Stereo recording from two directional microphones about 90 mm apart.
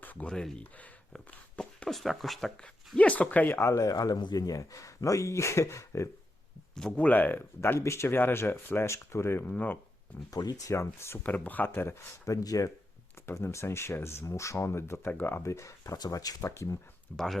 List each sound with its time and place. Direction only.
0.0 s a sound: 20° left (ahead or behind)
0.3 s speech: 10° left (ahead or behind)
3.0 s speech: 15° left (ahead or behind); by 6.1 s 35° left (ahead or behind)
6.7 s speech: 10° left (ahead or behind); by 9.4 s 30° left (ahead or behind)
9.5 s speech: 20° left (ahead or behind)
10.3 s speech: 40° left (ahead or behind)
11.2 s speech: 20° left (ahead or behind); by 12.7 s 40° left (ahead or behind)
13.2 s speech: 30° left (ahead or behind)
17.1 s speech: 10° left (ahead or behind)